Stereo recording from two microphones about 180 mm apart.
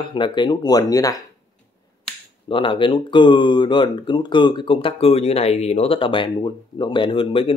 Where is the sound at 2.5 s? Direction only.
30° left (ahead or behind).